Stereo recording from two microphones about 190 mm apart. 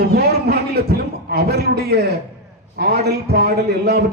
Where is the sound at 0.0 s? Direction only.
55° right (ahead or behind).